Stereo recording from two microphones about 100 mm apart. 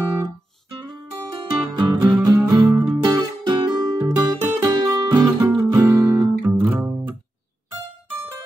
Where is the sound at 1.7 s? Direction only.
45° right (ahead or behind).